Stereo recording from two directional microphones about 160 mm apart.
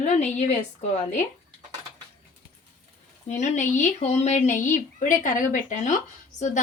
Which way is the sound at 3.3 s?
45° left (ahead or behind).